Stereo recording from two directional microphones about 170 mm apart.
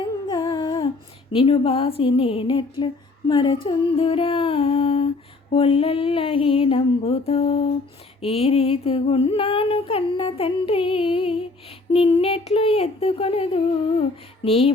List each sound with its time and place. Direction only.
0.3 s humming: 25° left (ahead or behind)
1.3 s speech: 35° left (ahead or behind)